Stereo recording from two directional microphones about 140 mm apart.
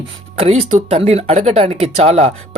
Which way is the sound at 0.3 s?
45° right (ahead or behind).